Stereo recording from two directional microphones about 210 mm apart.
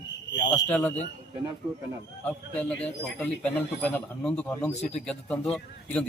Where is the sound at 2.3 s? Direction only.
5° left (ahead or behind).